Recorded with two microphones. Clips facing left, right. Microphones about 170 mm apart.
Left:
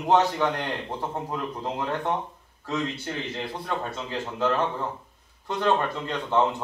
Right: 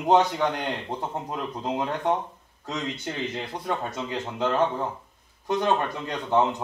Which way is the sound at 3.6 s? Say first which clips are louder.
Right 4 dB; 15° right (ahead or behind).